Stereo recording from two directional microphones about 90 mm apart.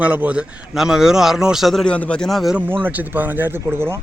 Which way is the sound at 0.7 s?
5° right (ahead or behind).